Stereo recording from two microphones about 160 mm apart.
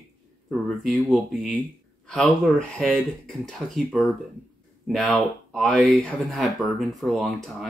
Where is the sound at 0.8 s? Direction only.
Centre (ahead or behind).